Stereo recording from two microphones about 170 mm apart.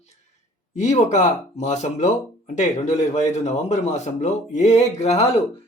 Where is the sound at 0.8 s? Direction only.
45° left (ahead or behind).